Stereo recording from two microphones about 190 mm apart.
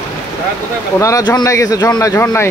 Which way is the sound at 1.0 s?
15° left (ahead or behind).